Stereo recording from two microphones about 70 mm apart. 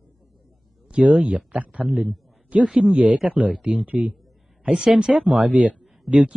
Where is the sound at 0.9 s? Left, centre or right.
Centre.